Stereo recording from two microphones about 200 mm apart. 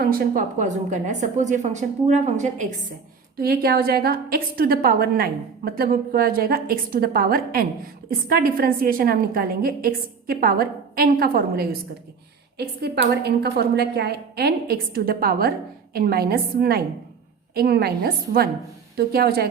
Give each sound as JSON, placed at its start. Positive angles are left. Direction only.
{"t": 0.0, "sound": "a woman's voice", "side_deg": -45}
{"t": 3.3, "sound": "a woman's voice", "side_deg": -50}